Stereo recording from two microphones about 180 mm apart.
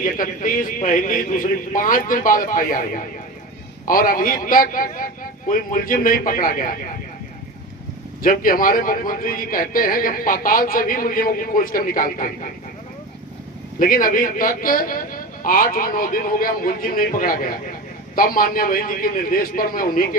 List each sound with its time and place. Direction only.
0.0 s a man's voice: 50° left (ahead or behind)
8.2 s a man's voice: 50° left (ahead or behind)
13.7 s a man's voice: 50° left (ahead or behind)